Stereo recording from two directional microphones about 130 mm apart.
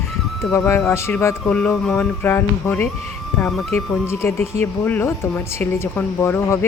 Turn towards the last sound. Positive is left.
turn(degrees=20)  # may be behind; listen again after turning